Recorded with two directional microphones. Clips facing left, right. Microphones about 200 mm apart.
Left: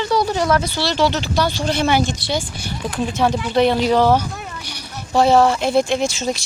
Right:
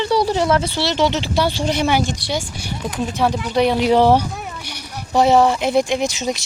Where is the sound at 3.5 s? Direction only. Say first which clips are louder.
Left 1 dB; 10° right (ahead or behind).